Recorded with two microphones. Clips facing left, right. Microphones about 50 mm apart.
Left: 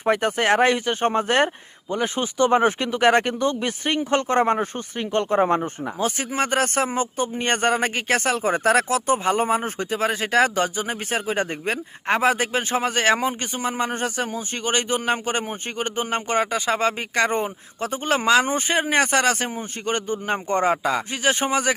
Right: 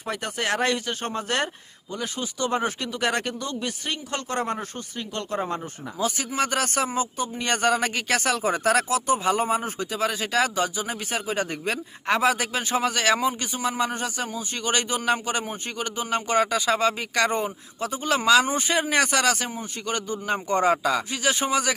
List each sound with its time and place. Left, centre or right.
0.0 s speech: left
14.7 s speech: left
17.7 s speech: left